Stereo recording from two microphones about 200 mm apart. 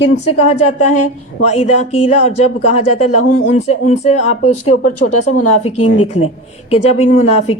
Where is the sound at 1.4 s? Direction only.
35° left (ahead or behind).